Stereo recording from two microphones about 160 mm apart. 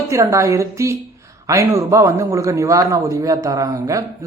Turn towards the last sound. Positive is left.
turn(degrees=-20)  # may be behind; listen again after turning